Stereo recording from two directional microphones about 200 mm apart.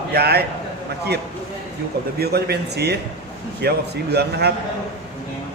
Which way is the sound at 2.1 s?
55° right (ahead or behind).